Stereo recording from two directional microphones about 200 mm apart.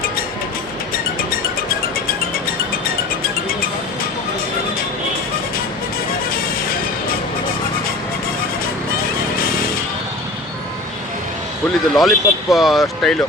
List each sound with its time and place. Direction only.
6.3 s music: 45° left (ahead or behind)
11.9 s speech: centre (ahead or behind)